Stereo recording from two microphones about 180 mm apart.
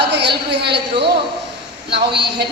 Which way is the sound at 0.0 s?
70° right (ahead or behind).